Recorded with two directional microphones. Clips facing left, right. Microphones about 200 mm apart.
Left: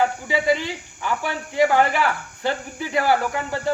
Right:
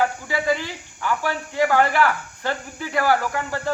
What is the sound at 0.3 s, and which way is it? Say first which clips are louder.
Speech: left 2 dB; 15° left (ahead or behind).